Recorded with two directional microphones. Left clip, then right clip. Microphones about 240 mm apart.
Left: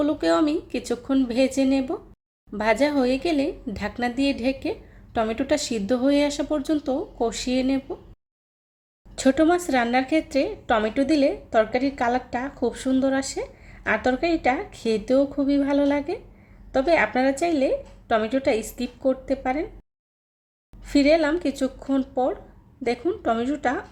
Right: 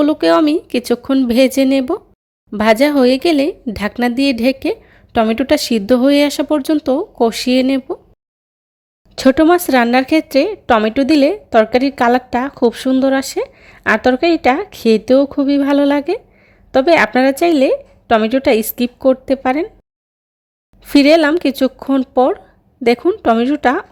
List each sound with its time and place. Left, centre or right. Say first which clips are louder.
0.0 s speech: right 9 dB; right
9.1 s speech: right 9 dB; right
20.8 s speech: right 9 dB; right